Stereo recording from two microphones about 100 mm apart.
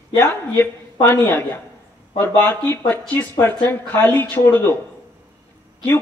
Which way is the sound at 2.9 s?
20° left (ahead or behind).